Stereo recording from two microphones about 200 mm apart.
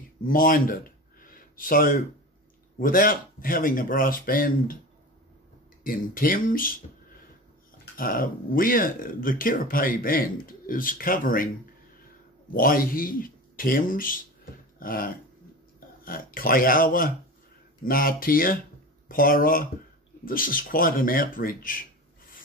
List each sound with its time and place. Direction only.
0.2 s speech: 45° left (ahead or behind)
1.2 s a sound: 45° left (ahead or behind)
2.8 s speech: 45° left (ahead or behind)
5.9 s speech: 45° left (ahead or behind)
7.9 s speech: 45° left (ahead or behind)